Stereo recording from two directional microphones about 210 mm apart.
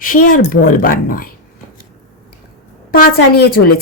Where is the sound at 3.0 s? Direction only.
45° left (ahead or behind).